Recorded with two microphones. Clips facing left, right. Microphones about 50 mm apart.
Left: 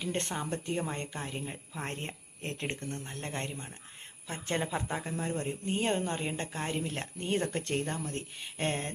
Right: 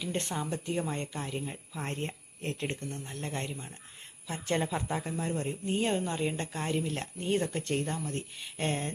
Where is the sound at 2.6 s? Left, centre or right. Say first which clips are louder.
Even; left.